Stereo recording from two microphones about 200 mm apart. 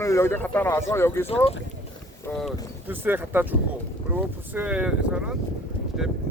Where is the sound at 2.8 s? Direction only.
10° right (ahead or behind).